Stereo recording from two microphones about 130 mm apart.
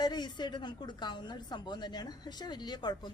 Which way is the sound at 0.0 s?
35° left (ahead or behind).